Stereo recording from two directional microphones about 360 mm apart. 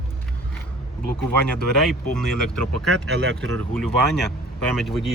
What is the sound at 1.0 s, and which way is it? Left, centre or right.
Speech, right.